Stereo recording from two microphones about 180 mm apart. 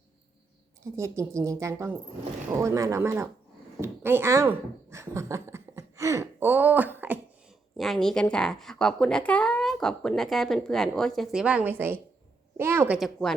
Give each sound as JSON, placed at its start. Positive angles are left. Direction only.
{"t": 0.9, "sound": "speech", "side_deg": -15}
{"t": 7.8, "sound": "speech", "side_deg": 0}
{"t": 13.0, "sound": "speech", "side_deg": 0}